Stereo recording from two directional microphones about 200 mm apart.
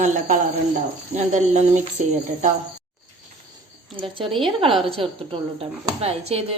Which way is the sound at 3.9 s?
25° right (ahead or behind).